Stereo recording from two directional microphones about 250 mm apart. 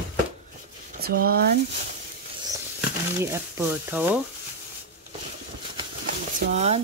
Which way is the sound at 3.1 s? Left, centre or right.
Centre.